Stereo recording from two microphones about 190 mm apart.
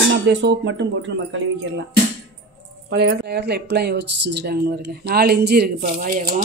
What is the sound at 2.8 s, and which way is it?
Speech, 65° right (ahead or behind).